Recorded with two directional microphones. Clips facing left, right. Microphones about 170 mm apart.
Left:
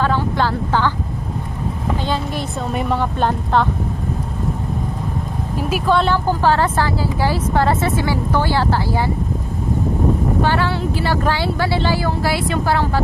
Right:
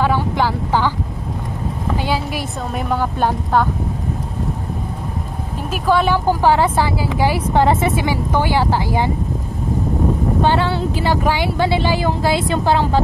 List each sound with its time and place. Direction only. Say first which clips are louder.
0.0 s speech: right 1 dB; 10° right (ahead or behind)
2.0 s a woman's voice: right 1 dB; 5° right (ahead or behind)
5.9 s speech: right 2 dB; 10° right (ahead or behind)
10.4 s speech: right 2 dB; 20° right (ahead or behind)